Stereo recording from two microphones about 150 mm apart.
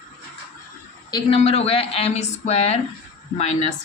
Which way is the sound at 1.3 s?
40° left (ahead or behind).